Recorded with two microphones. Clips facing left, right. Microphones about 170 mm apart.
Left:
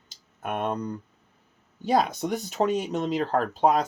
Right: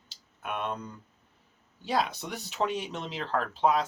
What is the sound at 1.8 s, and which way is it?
Speech, 45° left (ahead or behind).